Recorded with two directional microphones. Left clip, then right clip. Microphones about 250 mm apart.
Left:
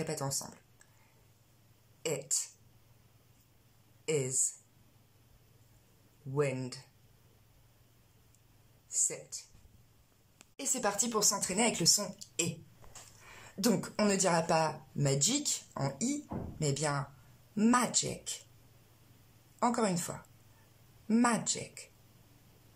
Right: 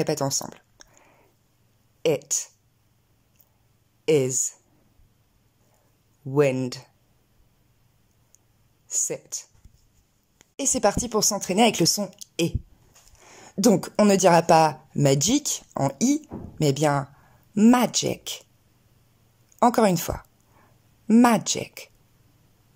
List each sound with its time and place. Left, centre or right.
0.0 s speech: right
2.0 s speech: right
4.0 s speech: right
6.3 s speech: right
8.8 s speech: right
10.5 s speech: right
19.6 s speech: right